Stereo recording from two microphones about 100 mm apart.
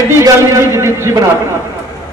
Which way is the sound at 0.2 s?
25° right (ahead or behind).